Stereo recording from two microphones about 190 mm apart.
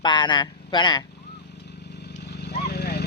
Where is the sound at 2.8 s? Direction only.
60° left (ahead or behind).